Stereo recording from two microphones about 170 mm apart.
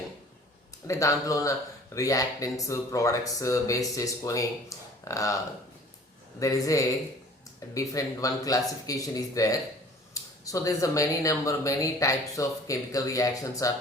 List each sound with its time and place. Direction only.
0.9 s speech: 20° left (ahead or behind)
4.7 s a sound: 20° left (ahead or behind)
5.0 s speech: 20° left (ahead or behind)
6.4 s speech: 20° left (ahead or behind)